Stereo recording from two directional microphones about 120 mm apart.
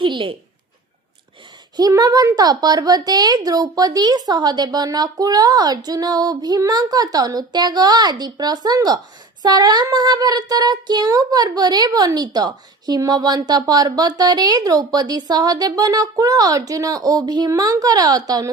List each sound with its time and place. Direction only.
0.0 s speech: 45° right (ahead or behind)
1.7 s speech: 35° right (ahead or behind)